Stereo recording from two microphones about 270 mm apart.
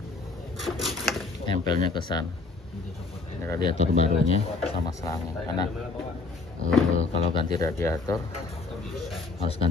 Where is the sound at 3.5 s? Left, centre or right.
Centre.